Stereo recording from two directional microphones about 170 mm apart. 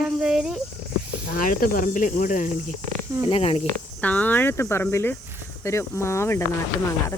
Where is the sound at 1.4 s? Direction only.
55° left (ahead or behind).